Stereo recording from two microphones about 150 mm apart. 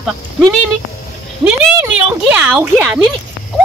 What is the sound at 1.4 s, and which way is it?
Speech, 10° right (ahead or behind).